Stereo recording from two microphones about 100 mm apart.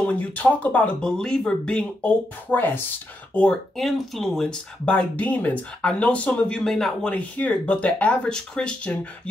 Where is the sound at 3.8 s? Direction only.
Centre (ahead or behind).